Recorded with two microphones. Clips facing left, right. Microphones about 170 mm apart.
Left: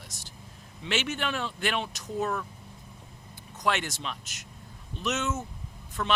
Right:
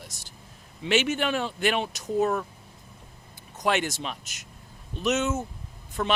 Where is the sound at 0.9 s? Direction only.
10° right (ahead or behind).